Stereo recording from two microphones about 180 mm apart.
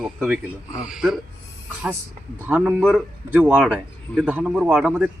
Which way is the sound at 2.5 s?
10° right (ahead or behind).